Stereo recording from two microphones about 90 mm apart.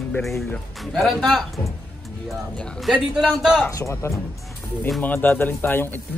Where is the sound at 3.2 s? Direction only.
5° right (ahead or behind).